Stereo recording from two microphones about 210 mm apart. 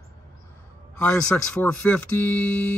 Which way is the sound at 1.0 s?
5° left (ahead or behind).